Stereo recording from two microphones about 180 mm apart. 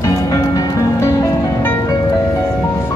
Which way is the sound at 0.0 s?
20° left (ahead or behind).